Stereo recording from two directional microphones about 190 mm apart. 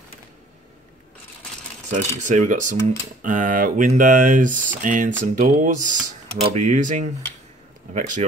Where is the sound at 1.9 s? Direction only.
40° right (ahead or behind).